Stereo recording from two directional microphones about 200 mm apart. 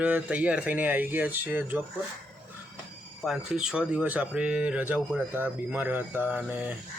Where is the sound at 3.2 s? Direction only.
Centre (ahead or behind).